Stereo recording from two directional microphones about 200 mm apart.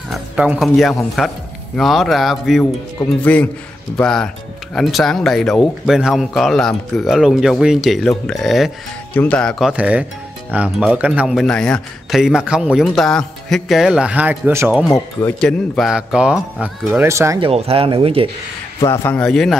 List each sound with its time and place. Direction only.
0.1 s a man's voice: 5° right (ahead or behind)
14.9 s a man's voice: 10° left (ahead or behind); by 17.4 s 15° right (ahead or behind)
17.4 s speech: 30° right (ahead or behind)
18.9 s a man's voice: 10° left (ahead or behind)